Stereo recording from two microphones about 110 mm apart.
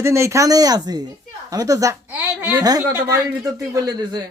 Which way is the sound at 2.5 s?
35° right (ahead or behind).